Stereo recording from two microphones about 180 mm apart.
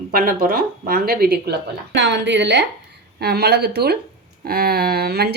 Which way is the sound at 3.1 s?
60° right (ahead or behind).